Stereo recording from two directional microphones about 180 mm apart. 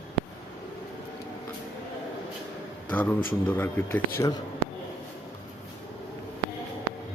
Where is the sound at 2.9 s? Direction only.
10° left (ahead or behind).